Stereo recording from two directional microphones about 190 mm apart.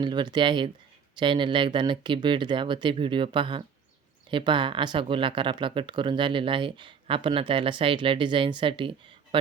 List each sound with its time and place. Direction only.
0.0 s speech: 25° right (ahead or behind)